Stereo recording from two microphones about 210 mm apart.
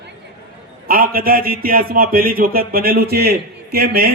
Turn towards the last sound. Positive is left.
turn(degrees=-45)  # may be behind; listen again after turning